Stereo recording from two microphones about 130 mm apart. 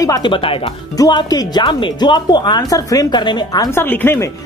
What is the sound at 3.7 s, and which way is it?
Speech, 15° left (ahead or behind).